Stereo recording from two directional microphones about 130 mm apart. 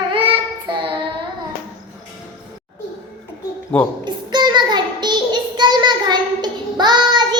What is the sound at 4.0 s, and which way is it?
Child singing, 35° right (ahead or behind).